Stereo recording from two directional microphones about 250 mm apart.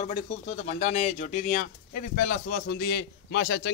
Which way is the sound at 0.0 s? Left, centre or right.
Left.